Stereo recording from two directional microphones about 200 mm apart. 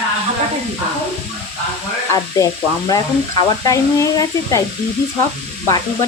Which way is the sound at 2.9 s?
20° left (ahead or behind).